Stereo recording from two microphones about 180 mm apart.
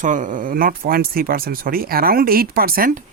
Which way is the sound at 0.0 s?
45° right (ahead or behind).